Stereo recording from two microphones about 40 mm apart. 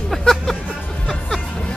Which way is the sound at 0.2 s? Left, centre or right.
Centre.